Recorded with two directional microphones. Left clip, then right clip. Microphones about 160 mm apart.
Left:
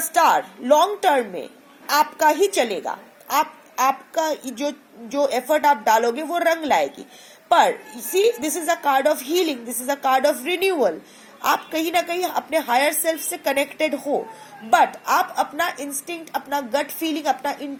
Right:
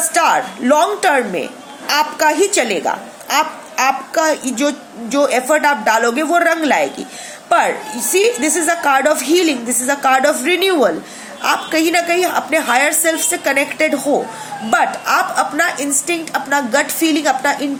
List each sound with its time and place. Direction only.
0.1 s speech: 25° left (ahead or behind)
8.1 s speech: 25° left (ahead or behind)